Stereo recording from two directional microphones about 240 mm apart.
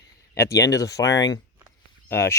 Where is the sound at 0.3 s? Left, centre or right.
Centre.